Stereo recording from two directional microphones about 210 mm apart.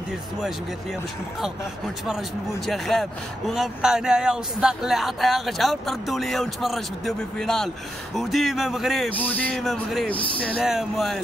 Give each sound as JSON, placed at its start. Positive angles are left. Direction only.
{"t": 2.0, "sound": "speech", "side_deg": 0}
{"t": 10.1, "sound": "speech", "side_deg": 25}
{"t": 10.4, "sound": "speech", "side_deg": 0}